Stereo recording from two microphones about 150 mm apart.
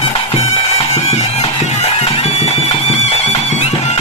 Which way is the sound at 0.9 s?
45° left (ahead or behind).